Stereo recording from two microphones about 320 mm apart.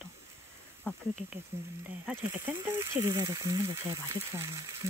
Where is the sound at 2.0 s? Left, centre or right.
Centre.